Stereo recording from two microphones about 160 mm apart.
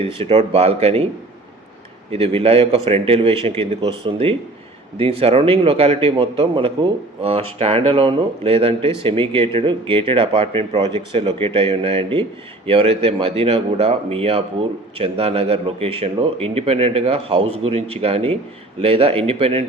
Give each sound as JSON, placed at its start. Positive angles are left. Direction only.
{"t": 0.1, "sound": "a man's voice", "side_deg": -35}
{"t": 2.0, "sound": "a man's voice", "side_deg": -35}